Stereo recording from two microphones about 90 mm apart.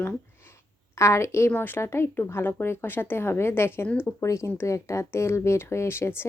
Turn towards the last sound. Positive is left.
turn(degrees=30)  # may be behind; listen again after turning